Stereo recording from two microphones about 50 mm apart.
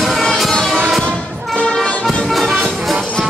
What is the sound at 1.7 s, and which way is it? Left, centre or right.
Music, centre.